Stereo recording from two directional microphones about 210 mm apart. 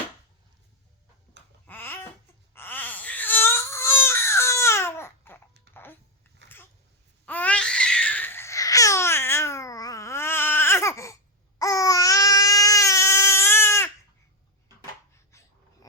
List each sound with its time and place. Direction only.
1.6 s babbling: 10° left (ahead or behind)
2.6 s wail: 10° left (ahead or behind)
5.7 s babbling: 10° left (ahead or behind)
7.3 s babbling: 5° left (ahead or behind)
11.6 s baby cry: 15° left (ahead or behind)
15.3 s wheeze: 15° left (ahead or behind)